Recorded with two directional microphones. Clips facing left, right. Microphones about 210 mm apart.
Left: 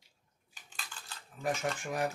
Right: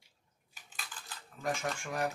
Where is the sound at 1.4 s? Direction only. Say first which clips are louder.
Left 2 dB; 20° left (ahead or behind).